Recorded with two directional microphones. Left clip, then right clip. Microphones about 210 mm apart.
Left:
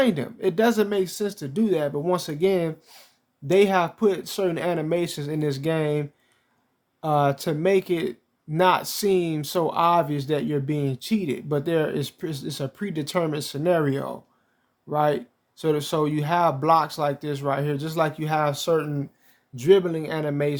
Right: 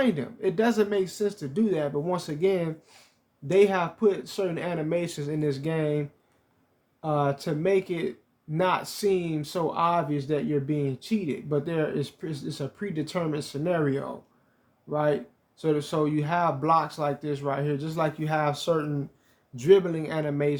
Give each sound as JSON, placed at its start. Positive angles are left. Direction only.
{"t": 0.0, "sound": "speech", "side_deg": 30}